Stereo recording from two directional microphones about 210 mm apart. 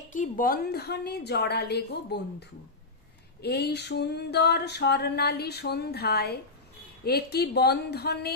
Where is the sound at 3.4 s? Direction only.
50° left (ahead or behind).